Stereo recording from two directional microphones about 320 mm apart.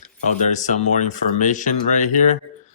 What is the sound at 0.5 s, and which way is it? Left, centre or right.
Speech, left.